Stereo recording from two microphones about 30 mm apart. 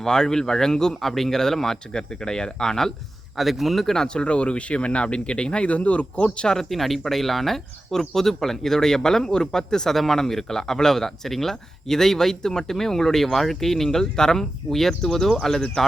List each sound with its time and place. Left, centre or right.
0.0 s speech: left
3.3 s a man's voice: centre
3.9 s speech: left
5.6 s speech: left
6.2 s speech: left
6.6 s speech: centre
9.9 s speech: centre